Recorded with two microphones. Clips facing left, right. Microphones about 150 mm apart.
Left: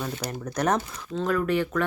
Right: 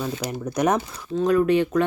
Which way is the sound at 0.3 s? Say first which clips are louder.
Right 3 dB; 10° right (ahead or behind).